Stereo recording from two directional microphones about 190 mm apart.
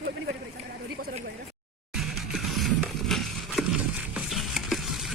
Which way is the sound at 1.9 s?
Centre (ahead or behind).